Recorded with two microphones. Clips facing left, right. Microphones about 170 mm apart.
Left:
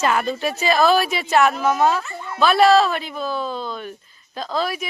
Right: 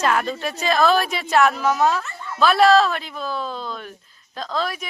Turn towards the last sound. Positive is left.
turn(degrees=5)  # may be behind; listen again after turning